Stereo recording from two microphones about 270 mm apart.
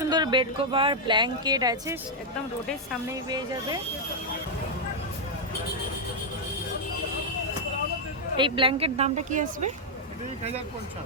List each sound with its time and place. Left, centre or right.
0.0 s speech: centre
3.2 s speech: centre
8.4 s a woman's voice: centre